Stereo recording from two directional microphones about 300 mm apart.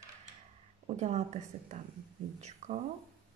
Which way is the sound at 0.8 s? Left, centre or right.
Right.